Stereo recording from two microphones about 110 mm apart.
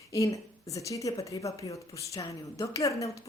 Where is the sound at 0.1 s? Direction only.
30° left (ahead or behind).